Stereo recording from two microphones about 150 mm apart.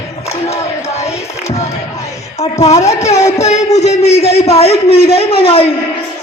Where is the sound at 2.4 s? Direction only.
45° left (ahead or behind).